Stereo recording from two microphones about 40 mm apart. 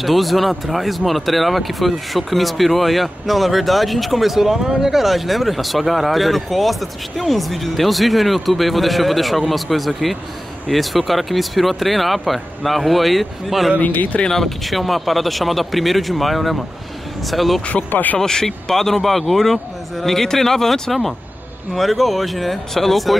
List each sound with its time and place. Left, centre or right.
0.0 s speech: centre
13.7 s speech: left
14.3 s speech: centre
17.9 s speech: left
18.2 s a man's voice: centre